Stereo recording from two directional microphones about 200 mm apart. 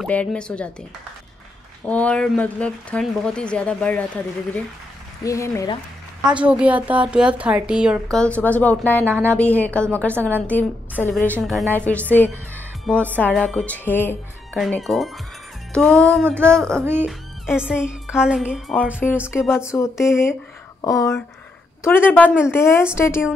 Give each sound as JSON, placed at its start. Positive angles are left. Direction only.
{"t": 0.0, "sound": "speech", "side_deg": 5}
{"t": 1.9, "sound": "speech", "side_deg": 5}
{"t": 5.2, "sound": "speech", "side_deg": 15}
{"t": 6.2, "sound": "speech", "side_deg": -5}
{"t": 8.2, "sound": "speech", "side_deg": 5}
{"t": 16.8, "sound": "speech", "side_deg": -10}
{"t": 18.9, "sound": "speech", "side_deg": 10}
{"t": 19.4, "sound": "speech", "side_deg": 0}
{"t": 19.7, "sound": "speech", "side_deg": 15}